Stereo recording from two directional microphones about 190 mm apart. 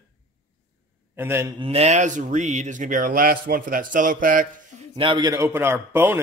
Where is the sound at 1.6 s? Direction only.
30° right (ahead or behind).